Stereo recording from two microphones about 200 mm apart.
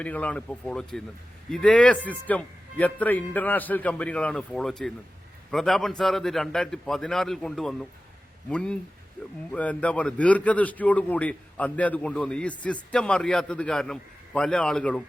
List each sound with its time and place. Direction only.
0.0 s a man's voice: 5° left (ahead or behind)